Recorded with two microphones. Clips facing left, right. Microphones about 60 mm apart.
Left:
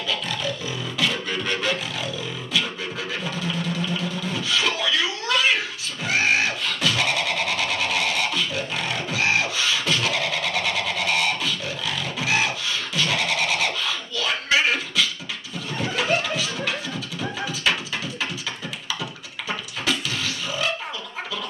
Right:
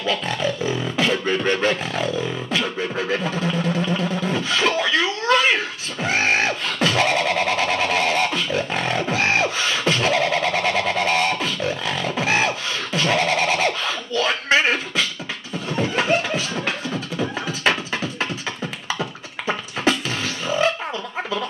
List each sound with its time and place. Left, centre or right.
0.0 s beatboxing: right
15.7 s a sound: right
16.3 s music: right
18.9 s beatboxing: right